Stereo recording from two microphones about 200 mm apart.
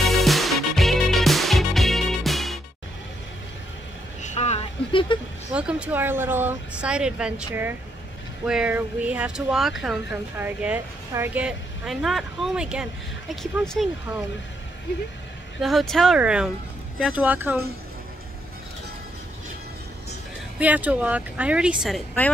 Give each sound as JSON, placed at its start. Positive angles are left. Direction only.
{"t": 0.0, "sound": "music", "side_deg": 0}
{"t": 4.2, "sound": "vehicle", "side_deg": 35}
{"t": 5.5, "sound": "speech", "side_deg": -5}
{"t": 15.6, "sound": "speech", "side_deg": 0}
{"t": 20.5, "sound": "speech", "side_deg": -5}